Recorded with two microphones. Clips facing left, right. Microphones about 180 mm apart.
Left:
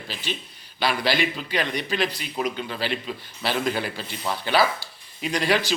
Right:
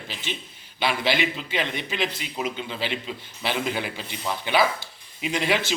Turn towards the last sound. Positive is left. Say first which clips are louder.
# left 1 dB
turn(degrees=-20)  # may be behind; listen again after turning